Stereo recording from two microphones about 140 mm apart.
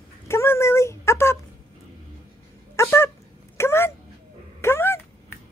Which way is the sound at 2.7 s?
20° left (ahead or behind).